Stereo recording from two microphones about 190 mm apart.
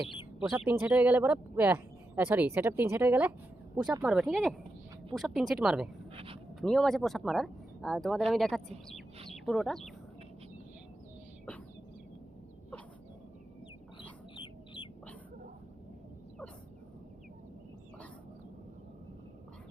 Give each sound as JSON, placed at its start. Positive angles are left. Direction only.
{"t": 0.6, "sound": "speech", "side_deg": -10}
{"t": 6.1, "sound": "a sound", "side_deg": -30}
{"t": 6.6, "sound": "speech", "side_deg": 0}
{"t": 14.3, "sound": "bird", "side_deg": 25}